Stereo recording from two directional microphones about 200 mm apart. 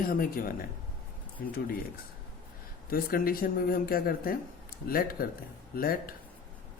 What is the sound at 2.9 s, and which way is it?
A man's voice, 45° left (ahead or behind).